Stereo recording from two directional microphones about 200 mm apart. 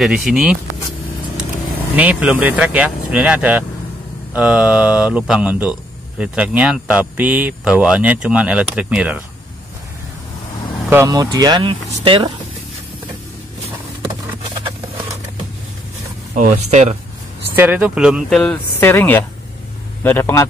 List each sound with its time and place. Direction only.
0.0 s speech: centre (ahead or behind)
2.0 s speech: 5° right (ahead or behind)
10.9 s speech: 15° right (ahead or behind)
14.5 s a sound: 25° right (ahead or behind)
16.3 s speech: 40° right (ahead or behind)
17.6 s a man's voice: 5° right (ahead or behind); by 20.4 s 10° left (ahead or behind)